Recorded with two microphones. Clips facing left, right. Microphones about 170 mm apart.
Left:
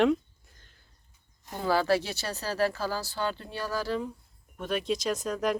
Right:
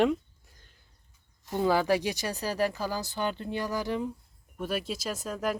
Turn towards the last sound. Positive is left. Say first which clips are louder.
# left 3 dB
turn(degrees=-5)  # may be behind; listen again after turning